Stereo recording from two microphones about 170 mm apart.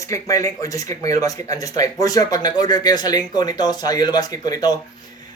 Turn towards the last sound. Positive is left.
turn(degrees=25)  # may be behind; listen again after turning